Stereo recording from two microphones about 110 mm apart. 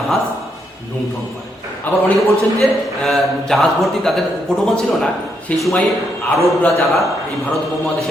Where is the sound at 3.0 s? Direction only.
Centre (ahead or behind).